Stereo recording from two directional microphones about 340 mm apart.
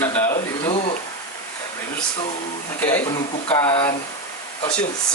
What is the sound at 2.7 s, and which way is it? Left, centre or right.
Speech, centre.